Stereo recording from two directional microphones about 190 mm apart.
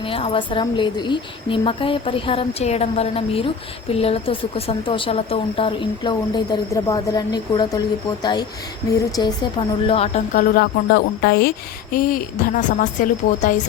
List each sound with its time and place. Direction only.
0.0 s a woman's voice: 30° left (ahead or behind)
10.3 s a woman's voice: 55° left (ahead or behind)